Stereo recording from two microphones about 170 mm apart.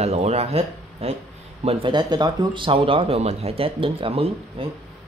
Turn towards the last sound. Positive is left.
turn(degrees=-35)  # may be behind; listen again after turning